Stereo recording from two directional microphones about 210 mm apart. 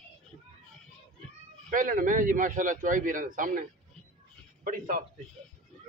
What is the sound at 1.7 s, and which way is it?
A man's voice, 40° right (ahead or behind).